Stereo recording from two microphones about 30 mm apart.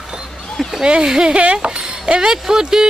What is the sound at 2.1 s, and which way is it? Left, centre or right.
Speech, right.